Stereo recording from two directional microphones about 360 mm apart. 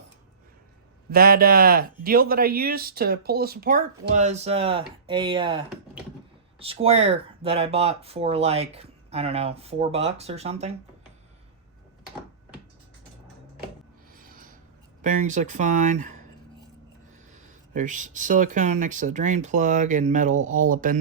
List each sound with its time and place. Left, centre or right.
1.1 s speech: right
14.2 s a sound: right
15.0 s speech: right
17.3 s speech: right